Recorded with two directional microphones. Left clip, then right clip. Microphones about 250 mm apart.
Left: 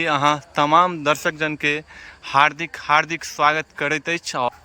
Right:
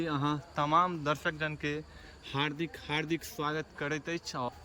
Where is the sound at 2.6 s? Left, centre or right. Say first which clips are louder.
Left 16 dB; centre.